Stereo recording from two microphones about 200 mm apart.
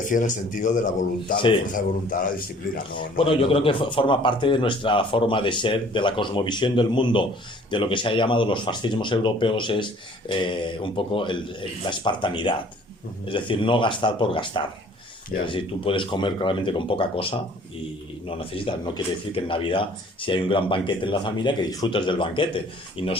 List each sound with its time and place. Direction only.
0.0 s speech: 40° left (ahead or behind)
2.9 s speech: 25° left (ahead or behind)